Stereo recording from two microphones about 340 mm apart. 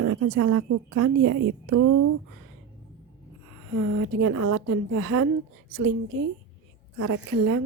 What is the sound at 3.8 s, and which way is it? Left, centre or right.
A woman's voice, right.